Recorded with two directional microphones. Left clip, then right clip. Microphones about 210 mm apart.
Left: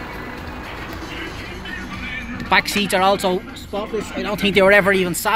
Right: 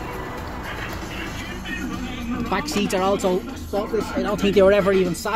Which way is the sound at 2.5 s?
15° left (ahead or behind).